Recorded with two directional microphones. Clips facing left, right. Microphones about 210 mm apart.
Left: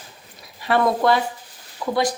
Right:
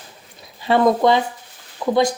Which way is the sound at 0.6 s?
25° right (ahead or behind).